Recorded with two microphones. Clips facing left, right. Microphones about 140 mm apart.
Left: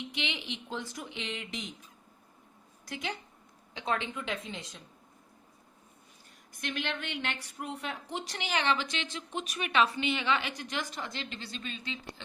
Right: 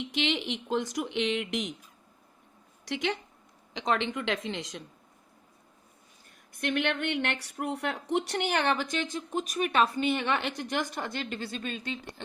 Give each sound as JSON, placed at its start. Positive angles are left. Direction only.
{"t": 0.0, "sound": "speech", "side_deg": -70}
{"t": 2.8, "sound": "speech", "side_deg": -70}
{"t": 6.6, "sound": "a woman's voice", "side_deg": -60}